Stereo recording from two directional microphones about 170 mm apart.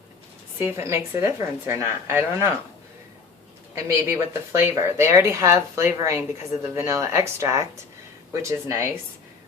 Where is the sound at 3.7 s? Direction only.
15° right (ahead or behind).